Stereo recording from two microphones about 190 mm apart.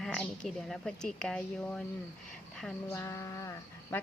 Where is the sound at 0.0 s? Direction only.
5° left (ahead or behind).